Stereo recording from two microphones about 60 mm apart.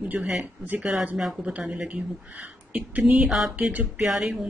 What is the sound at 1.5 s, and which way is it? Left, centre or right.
Speech, right.